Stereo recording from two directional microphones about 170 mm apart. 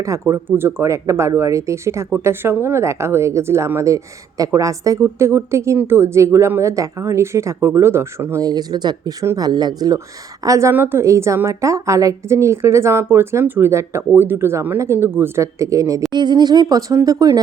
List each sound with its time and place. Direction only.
0.0 s speech: 15° right (ahead or behind)